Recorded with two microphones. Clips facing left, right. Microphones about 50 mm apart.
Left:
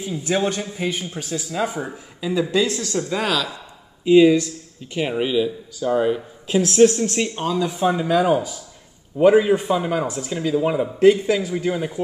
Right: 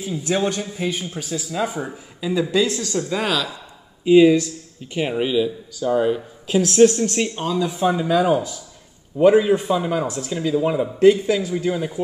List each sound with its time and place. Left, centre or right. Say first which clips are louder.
0.0 s a man's voice: even; centre